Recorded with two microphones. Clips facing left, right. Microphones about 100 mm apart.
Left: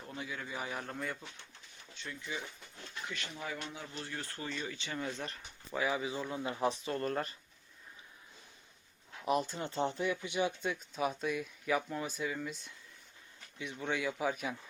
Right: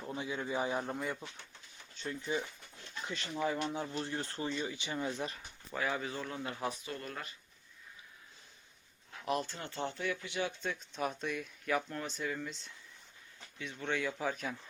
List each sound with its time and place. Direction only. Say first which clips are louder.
0.1 s a man's voice: right 5 dB; 25° right (ahead or behind)
0.9 s speech: right 2 dB; 15° right (ahead or behind)
2.0 s speech: right 6 dB; 35° right (ahead or behind)
3.9 s speech: right 5 dB; 25° right (ahead or behind); by 5.4 s 10° right (ahead or behind)
5.7 s speech: left 2 dB; 5° left (ahead or behind); by 6.9 s 25° left (ahead or behind)
6.9 s speech: left 8 dB; 40° left (ahead or behind)
9.4 s speech: left 4 dB; 20° left (ahead or behind); by 12.5 s 5° left (ahead or behind)
13.6 s speech: even; 15° left (ahead or behind)